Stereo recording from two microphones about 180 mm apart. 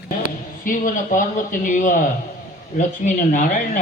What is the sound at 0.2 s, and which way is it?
A man's voice, 50° left (ahead or behind).